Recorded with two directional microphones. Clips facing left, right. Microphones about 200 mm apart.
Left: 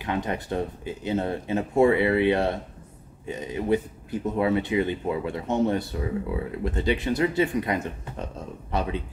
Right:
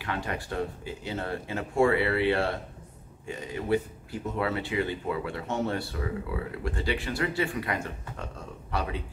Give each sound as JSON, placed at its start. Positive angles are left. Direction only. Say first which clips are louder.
{"t": 0.0, "sound": "speech", "louder": "left 5 dB", "side_deg": 20}